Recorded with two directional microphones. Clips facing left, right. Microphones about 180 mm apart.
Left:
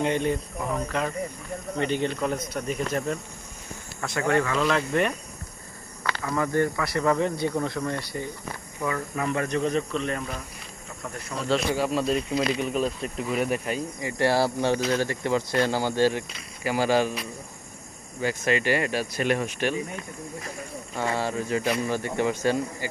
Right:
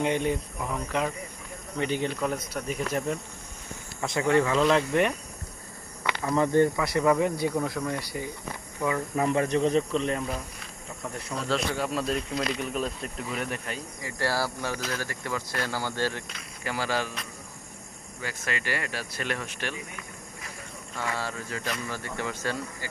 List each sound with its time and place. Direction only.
0.0 s speech: 10° right (ahead or behind)
1.8 s speech: 10° right (ahead or behind)
4.0 s speech: 20° right (ahead or behind)
6.0 s speech: 20° right (ahead or behind)
9.1 s speech: 25° right (ahead or behind)
11.3 s speech: centre (ahead or behind); by 17.1 s 15° left (ahead or behind)
18.2 s speech: 20° left (ahead or behind)
20.0 s speech: 30° left (ahead or behind)